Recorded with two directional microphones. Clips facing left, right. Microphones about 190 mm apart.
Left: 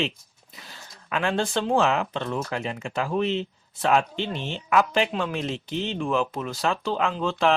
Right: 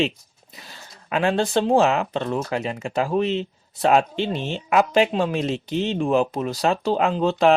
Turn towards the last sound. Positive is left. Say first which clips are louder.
# right 5 dB
turn(degrees=-40)  # may be behind; listen again after turning